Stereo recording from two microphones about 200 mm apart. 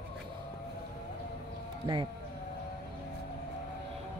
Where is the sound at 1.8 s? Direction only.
25° right (ahead or behind).